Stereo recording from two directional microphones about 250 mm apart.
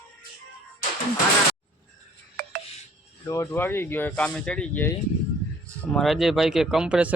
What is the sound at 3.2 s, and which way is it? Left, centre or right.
Speech, centre.